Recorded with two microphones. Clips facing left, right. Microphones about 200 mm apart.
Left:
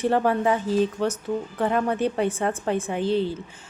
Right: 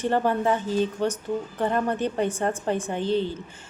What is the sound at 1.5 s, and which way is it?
A woman's voice, 5° left (ahead or behind).